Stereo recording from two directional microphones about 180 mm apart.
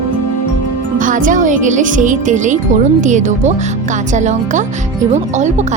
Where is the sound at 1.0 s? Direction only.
45° right (ahead or behind).